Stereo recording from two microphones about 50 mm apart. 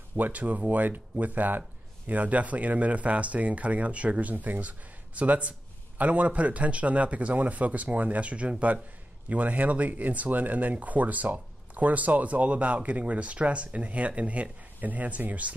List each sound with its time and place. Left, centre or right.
0.1 s speech: right